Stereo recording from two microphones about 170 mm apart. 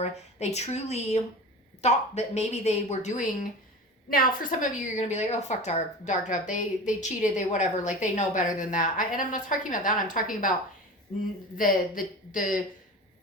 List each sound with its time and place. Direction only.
0.0 s speech: 40° left (ahead or behind)
4.1 s a woman's voice: 55° left (ahead or behind)
11.5 s a woman's voice: 55° left (ahead or behind)